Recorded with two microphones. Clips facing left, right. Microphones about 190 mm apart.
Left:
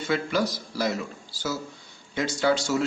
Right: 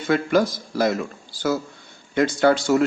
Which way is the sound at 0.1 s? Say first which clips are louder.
Right 7 dB; 50° right (ahead or behind).